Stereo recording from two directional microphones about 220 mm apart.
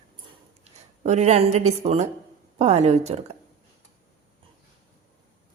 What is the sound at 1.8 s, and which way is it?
A woman's voice, 30° right (ahead or behind).